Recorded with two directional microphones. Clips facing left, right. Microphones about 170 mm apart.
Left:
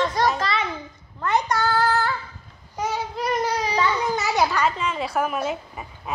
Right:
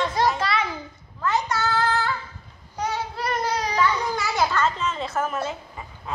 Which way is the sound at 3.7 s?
20° left (ahead or behind).